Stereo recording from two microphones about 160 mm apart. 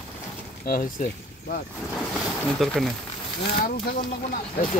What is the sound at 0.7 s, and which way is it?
Speech, 55° left (ahead or behind).